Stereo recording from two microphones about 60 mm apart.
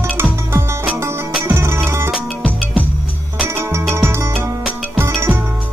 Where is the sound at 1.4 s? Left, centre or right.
Right.